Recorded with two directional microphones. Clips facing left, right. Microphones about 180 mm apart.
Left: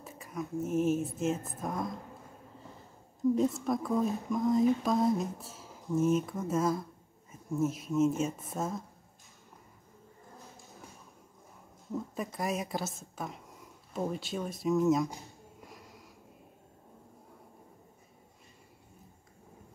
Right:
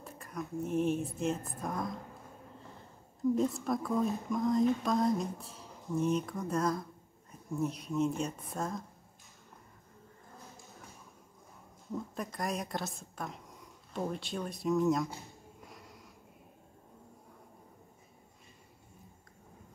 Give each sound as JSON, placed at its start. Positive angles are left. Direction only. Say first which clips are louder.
{"t": 0.0, "sound": "speech", "louder": "left 2 dB", "side_deg": 0}
{"t": 3.3, "sound": "speech", "louder": "left 2 dB", "side_deg": 0}
{"t": 11.9, "sound": "a woman's voice", "louder": "left 2 dB", "side_deg": 0}